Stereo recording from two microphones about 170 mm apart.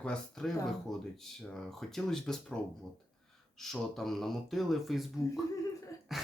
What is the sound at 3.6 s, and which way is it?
Speech, centre (ahead or behind).